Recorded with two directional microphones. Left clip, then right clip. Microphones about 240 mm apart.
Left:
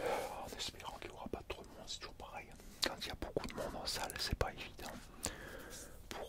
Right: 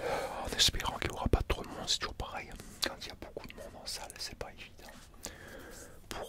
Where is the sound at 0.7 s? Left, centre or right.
Right.